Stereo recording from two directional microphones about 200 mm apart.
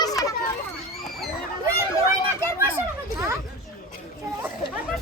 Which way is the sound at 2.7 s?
15° right (ahead or behind).